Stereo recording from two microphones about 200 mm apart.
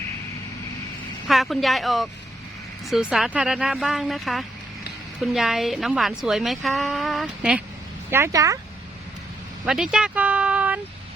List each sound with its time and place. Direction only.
1.3 s a woman's voice: centre (ahead or behind)
8.1 s speech: 15° right (ahead or behind)
9.6 s speech: 5° right (ahead or behind)